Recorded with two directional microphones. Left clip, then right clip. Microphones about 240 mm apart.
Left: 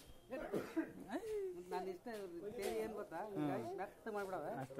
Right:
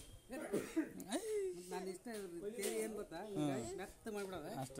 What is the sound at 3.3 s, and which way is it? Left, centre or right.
Speech, right.